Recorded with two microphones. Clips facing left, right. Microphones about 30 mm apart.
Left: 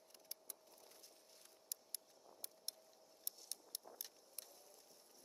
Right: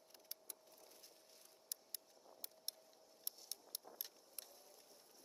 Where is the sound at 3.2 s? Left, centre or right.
Centre.